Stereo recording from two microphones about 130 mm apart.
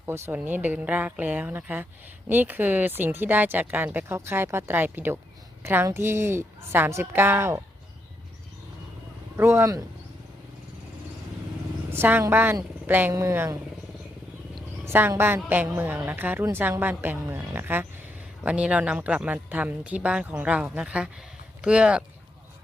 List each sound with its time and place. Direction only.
0.0 s a woman's voice: 15° right (ahead or behind)
9.4 s speech: 20° right (ahead or behind)
11.9 s speech: 15° right (ahead or behind)
14.8 s speech: 15° right (ahead or behind)